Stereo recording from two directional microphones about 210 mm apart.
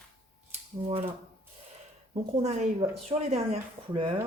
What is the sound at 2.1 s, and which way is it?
Speech, 30° right (ahead or behind).